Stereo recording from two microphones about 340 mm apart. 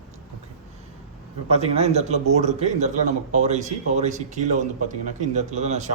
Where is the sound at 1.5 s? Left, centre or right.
Centre.